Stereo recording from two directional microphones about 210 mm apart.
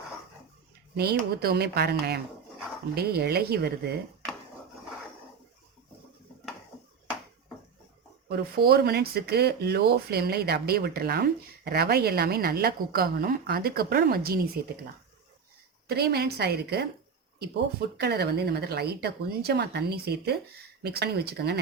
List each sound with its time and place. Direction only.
1.4 s speech: 50° right (ahead or behind)
8.3 s speech: 50° right (ahead or behind)
15.9 s speech: 50° right (ahead or behind)